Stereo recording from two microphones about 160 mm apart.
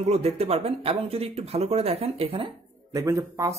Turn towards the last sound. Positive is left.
turn(degrees=-20)  # may be behind; listen again after turning